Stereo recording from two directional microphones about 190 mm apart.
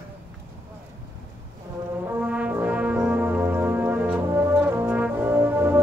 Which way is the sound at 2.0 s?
10° right (ahead or behind).